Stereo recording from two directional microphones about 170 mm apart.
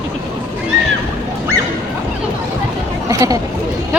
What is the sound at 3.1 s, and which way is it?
Speech, 20° right (ahead or behind).